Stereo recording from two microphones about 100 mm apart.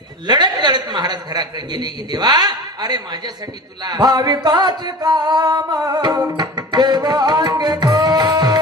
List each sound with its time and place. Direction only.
0.3 s a man's voice: 45° right (ahead or behind)
4.4 s music: 45° right (ahead or behind)